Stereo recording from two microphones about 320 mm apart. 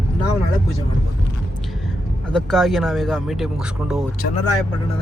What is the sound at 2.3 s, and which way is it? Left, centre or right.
Speech, centre.